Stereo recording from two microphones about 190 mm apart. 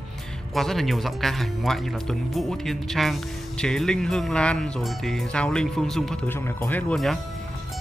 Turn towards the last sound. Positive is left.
turn(degrees=0)  # may be behind; listen again after turning